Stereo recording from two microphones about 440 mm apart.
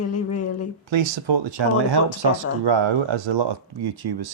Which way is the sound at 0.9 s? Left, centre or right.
Right.